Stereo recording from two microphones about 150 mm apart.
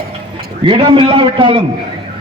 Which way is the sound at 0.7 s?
35° right (ahead or behind).